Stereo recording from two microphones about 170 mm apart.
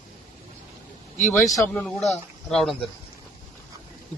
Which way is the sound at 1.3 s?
15° left (ahead or behind).